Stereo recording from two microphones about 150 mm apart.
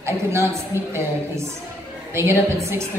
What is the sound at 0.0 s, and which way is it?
Speech, 15° right (ahead or behind).